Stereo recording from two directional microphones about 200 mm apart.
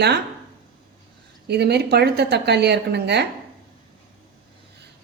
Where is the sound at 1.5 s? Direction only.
55° right (ahead or behind).